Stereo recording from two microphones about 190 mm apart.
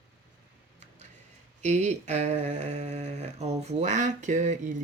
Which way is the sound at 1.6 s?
35° right (ahead or behind).